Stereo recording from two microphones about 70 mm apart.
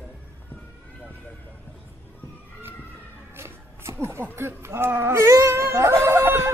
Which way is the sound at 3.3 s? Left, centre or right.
Right.